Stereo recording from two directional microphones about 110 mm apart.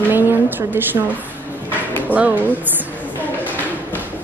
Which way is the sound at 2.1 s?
15° right (ahead or behind).